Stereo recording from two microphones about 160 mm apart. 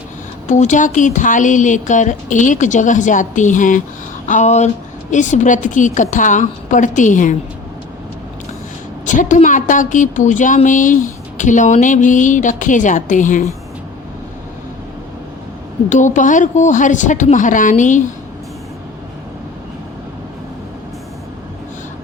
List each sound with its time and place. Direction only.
0.4 s a woman's voice: 50° left (ahead or behind)
9.0 s a woman's voice: 50° left (ahead or behind)
15.9 s a woman's voice: 50° left (ahead or behind)